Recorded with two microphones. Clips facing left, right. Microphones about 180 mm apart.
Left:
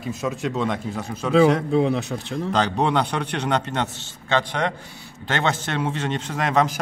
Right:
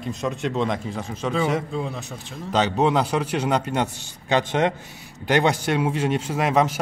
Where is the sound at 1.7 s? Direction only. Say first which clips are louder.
Left 9 dB; 70° left (ahead or behind).